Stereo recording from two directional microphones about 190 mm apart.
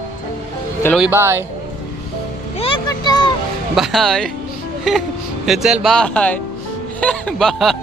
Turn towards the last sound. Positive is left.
turn(degrees=0)  # may be behind; listen again after turning